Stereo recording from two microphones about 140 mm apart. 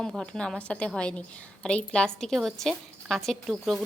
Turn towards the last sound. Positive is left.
turn(degrees=0)  # may be behind; listen again after turning